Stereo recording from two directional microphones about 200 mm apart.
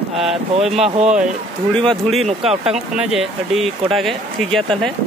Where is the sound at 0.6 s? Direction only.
Centre (ahead or behind).